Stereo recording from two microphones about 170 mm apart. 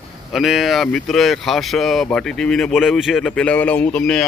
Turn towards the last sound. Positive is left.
turn(degrees=5)  # may be behind; listen again after turning